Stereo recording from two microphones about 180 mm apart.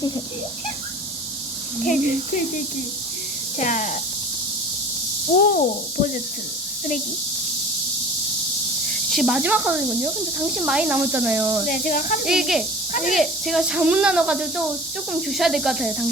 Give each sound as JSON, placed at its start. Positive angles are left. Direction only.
{"t": 1.8, "sound": "speech", "side_deg": 45}
{"t": 3.6, "sound": "speech", "side_deg": 45}
{"t": 5.4, "sound": "speech", "side_deg": 50}
{"t": 9.0, "sound": "speech", "side_deg": 0}
{"t": 11.7, "sound": "speech", "side_deg": 50}
{"t": 12.2, "sound": "speech", "side_deg": 0}